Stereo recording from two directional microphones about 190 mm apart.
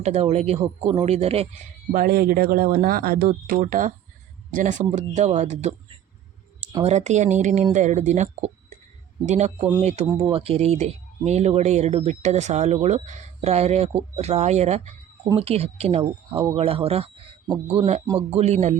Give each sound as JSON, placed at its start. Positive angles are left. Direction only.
{"t": 0.0, "sound": "speech", "side_deg": -35}
{"t": 1.9, "sound": "speech", "side_deg": -50}
{"t": 6.8, "sound": "a man's voice", "side_deg": -35}